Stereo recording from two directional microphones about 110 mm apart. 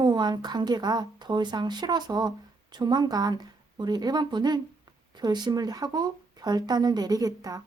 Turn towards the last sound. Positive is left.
turn(degrees=-35)  # may be behind; listen again after turning